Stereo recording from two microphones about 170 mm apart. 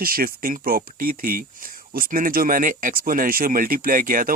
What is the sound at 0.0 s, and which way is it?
Speech, 60° right (ahead or behind).